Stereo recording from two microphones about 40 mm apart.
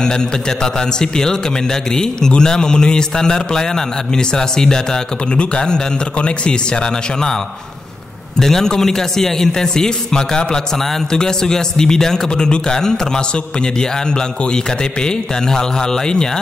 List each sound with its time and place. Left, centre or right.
0.0 s a man's voice: centre
8.4 s a man's voice: centre